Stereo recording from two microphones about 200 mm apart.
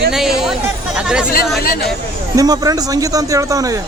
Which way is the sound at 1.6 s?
45° left (ahead or behind).